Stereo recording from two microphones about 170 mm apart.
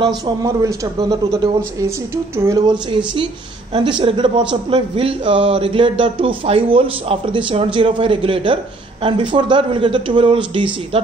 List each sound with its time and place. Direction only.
0.0 s speech: 20° right (ahead or behind)
4.0 s a man's voice: 30° right (ahead or behind)